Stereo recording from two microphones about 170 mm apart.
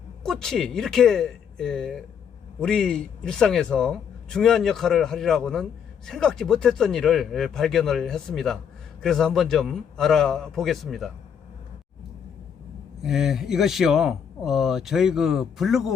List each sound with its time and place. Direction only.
0.2 s a man's voice: 5° left (ahead or behind)
13.0 s a man's voice: 5° right (ahead or behind)